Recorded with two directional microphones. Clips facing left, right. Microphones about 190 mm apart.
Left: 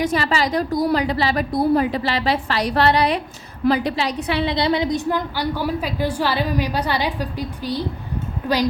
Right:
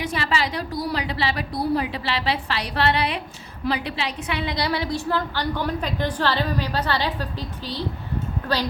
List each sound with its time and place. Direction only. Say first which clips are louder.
0.0 s a woman's voice: left 5 dB; 40° left (ahead or behind); by 7.9 s 10° left (ahead or behind)